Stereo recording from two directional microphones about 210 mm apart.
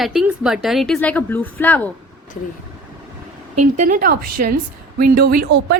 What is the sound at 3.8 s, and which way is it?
A woman's voice, 40° right (ahead or behind).